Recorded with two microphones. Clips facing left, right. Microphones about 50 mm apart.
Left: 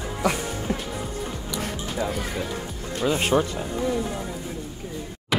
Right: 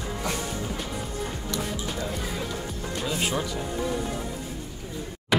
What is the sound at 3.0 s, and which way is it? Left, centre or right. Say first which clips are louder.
Speech: left 7 dB; left.